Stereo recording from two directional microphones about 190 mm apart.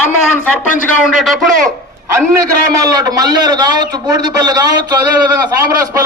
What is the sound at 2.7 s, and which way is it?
A man's voice, 20° right (ahead or behind).